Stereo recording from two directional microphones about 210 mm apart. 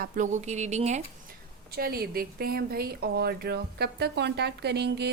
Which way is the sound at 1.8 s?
45° right (ahead or behind).